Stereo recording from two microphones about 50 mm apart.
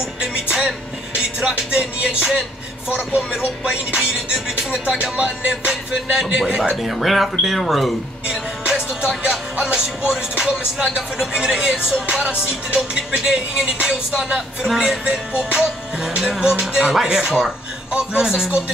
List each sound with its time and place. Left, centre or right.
0.2 s music: centre
8.3 s music: centre